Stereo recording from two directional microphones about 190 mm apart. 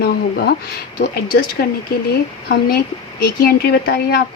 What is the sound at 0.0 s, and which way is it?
Speech, 55° left (ahead or behind).